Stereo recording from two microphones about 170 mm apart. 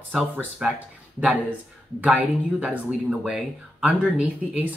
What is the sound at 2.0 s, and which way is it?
Speech, 10° right (ahead or behind).